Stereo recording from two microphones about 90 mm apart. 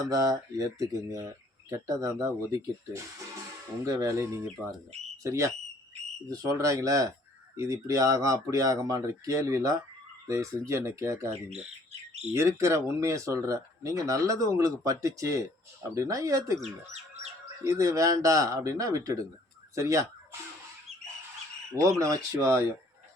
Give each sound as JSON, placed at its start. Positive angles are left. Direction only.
{"t": 0.1, "sound": "speech", "side_deg": -40}
{"t": 12.3, "sound": "speech", "side_deg": -35}
{"t": 21.8, "sound": "speech", "side_deg": -35}